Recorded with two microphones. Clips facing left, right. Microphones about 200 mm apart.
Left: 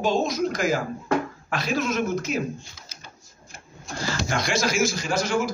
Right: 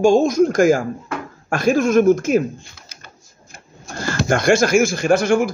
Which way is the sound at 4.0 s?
55° right (ahead or behind).